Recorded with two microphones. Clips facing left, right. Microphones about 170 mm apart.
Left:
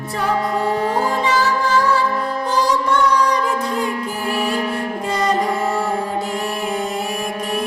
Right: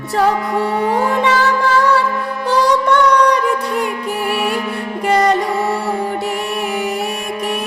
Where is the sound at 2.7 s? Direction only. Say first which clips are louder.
Right 5 dB; 65° right (ahead or behind).